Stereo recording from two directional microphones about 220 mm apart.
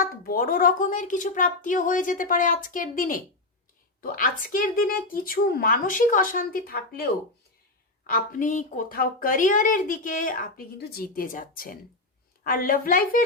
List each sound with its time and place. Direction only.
0.0 s a woman's voice: 40° left (ahead or behind)